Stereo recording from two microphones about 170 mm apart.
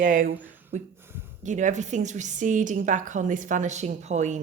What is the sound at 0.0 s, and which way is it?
A woman's voice, 50° right (ahead or behind).